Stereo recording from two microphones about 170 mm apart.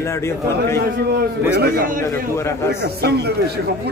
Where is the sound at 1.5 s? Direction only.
60° right (ahead or behind).